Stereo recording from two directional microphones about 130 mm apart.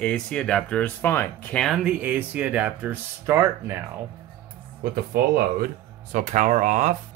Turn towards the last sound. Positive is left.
turn(degrees=-70)  # may be behind; listen again after turning